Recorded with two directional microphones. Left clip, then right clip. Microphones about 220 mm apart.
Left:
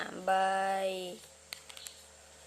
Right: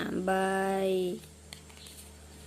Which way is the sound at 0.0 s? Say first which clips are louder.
Even; 5° left (ahead or behind).